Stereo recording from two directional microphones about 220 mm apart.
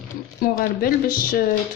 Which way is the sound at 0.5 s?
40° left (ahead or behind).